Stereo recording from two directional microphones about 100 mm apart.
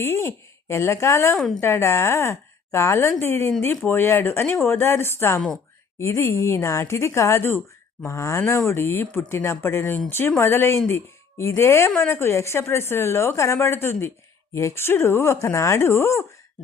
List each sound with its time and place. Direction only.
0.0 s speech: 25° left (ahead or behind)